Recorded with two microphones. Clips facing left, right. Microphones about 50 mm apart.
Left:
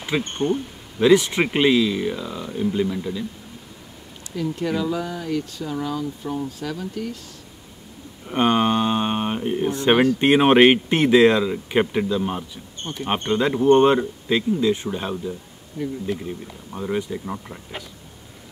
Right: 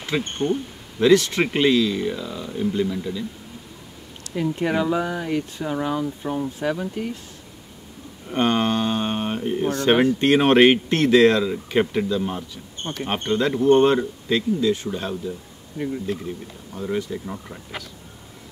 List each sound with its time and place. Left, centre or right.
0.4 s speech: centre
4.4 s speech: right
8.3 s speech: centre
16.7 s speech: centre